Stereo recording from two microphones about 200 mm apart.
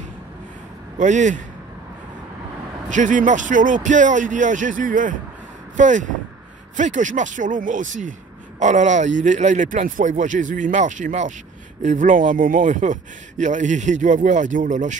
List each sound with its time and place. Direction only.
0.9 s speech: 40° right (ahead or behind)
2.9 s speech: 40° right (ahead or behind)